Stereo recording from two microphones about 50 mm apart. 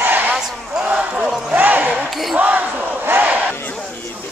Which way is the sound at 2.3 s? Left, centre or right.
Right.